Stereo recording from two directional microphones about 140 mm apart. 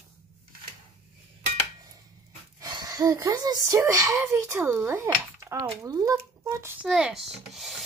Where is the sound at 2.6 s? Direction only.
25° right (ahead or behind).